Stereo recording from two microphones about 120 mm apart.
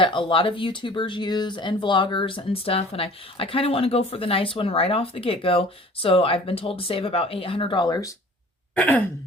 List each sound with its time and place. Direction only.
0.0 s speech: 45° left (ahead or behind)
8.7 s sigh: 15° left (ahead or behind)